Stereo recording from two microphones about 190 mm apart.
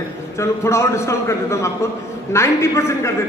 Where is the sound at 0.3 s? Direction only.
15° left (ahead or behind).